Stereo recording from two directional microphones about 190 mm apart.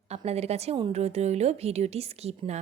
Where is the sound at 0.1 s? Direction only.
35° right (ahead or behind).